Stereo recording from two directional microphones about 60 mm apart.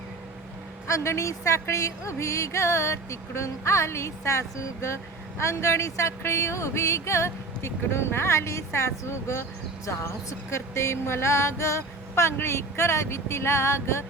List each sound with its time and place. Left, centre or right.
0.9 s music: left